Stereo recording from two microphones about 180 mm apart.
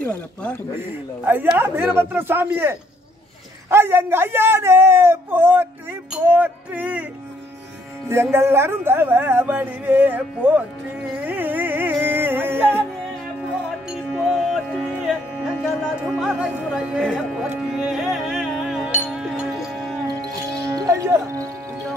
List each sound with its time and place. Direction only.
0.0 s speech: 5° left (ahead or behind)
0.7 s speech: 10° right (ahead or behind)
8.1 s speech: 15° right (ahead or behind)
11.2 s music: 10° right (ahead or behind)
15.6 s speech: 5° right (ahead or behind)
17.7 s music: 5° right (ahead or behind)
20.7 s music: 15° right (ahead or behind)